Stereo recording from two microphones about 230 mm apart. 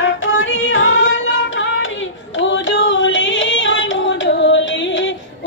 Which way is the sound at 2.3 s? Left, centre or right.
Left.